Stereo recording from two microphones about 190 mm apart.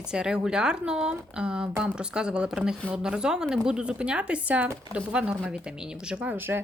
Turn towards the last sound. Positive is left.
turn(degrees=-10)  # may be behind; listen again after turning